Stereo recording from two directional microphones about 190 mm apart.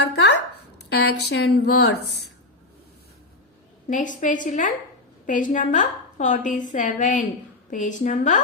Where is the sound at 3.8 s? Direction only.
40° left (ahead or behind).